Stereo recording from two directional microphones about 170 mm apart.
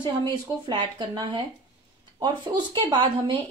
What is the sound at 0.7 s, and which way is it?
A woman's voice, 25° right (ahead or behind).